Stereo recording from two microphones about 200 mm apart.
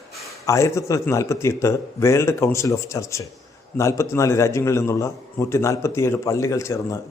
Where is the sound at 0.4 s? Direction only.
15° left (ahead or behind).